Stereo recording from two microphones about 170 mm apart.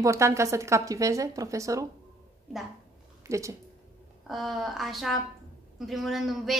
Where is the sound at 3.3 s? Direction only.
20° right (ahead or behind).